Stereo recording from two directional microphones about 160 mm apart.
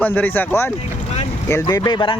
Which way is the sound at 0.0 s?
10° left (ahead or behind).